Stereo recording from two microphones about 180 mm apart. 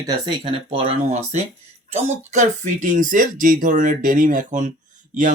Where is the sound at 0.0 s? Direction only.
25° right (ahead or behind).